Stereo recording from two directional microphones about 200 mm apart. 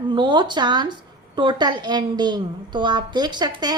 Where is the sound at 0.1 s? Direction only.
25° right (ahead or behind).